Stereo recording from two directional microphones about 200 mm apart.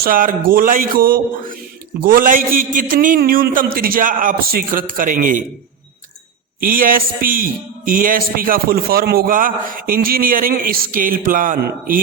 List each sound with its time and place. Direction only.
0.0 s a man's voice: 45° right (ahead or behind)
6.6 s a man's voice: 45° right (ahead or behind)